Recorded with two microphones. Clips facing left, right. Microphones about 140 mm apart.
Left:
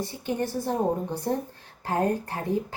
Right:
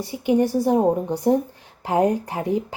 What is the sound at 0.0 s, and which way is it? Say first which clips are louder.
A woman's voice: right 9 dB; 15° right (ahead or behind).